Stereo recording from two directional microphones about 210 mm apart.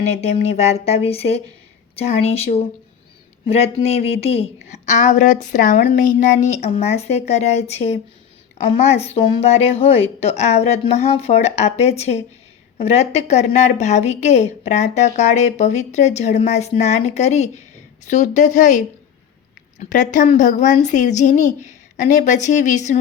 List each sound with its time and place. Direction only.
0.5 s a woman's voice: 30° left (ahead or behind)